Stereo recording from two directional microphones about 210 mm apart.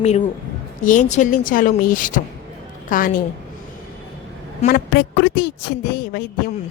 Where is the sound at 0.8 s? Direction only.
40° left (ahead or behind).